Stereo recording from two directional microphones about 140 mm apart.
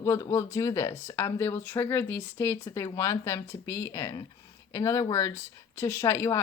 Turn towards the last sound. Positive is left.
turn(degrees=20)  # may be behind; listen again after turning